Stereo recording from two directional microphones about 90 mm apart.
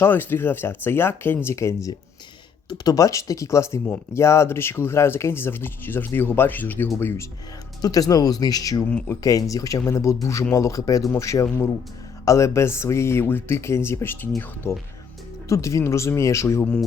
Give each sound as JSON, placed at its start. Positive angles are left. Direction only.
{"t": 0.0, "sound": "speech", "side_deg": 25}
{"t": 6.8, "sound": "speech", "side_deg": 30}
{"t": 7.8, "sound": "speech", "side_deg": 45}
{"t": 15.4, "sound": "speech", "side_deg": 35}